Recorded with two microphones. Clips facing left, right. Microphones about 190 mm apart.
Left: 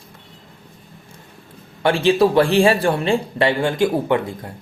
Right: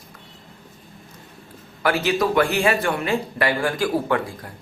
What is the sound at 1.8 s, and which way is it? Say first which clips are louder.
Speech: left 5 dB; 30° left (ahead or behind).